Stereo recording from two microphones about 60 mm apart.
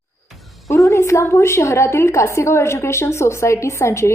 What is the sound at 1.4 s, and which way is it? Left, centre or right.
Speech, left.